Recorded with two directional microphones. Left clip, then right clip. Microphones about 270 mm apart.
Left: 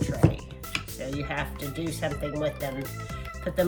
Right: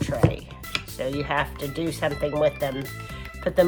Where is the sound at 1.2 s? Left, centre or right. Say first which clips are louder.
Right 7 dB; right.